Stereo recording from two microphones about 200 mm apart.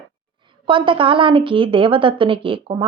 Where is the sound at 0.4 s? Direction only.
25° right (ahead or behind).